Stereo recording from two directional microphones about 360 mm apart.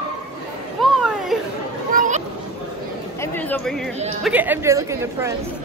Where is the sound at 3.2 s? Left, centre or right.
Centre.